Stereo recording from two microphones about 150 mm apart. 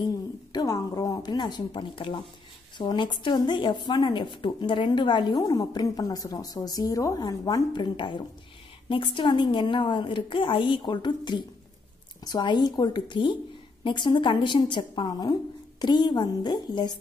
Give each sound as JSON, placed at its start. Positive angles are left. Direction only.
{"t": 0.5, "sound": "a woman's voice", "side_deg": 25}